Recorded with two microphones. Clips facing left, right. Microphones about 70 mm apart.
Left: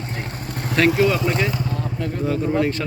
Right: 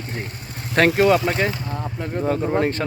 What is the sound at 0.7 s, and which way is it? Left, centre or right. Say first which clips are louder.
Speech: right 2 dB; right.